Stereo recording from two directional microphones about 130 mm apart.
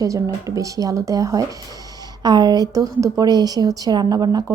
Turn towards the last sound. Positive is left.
turn(degrees=-30)  # may be behind; listen again after turning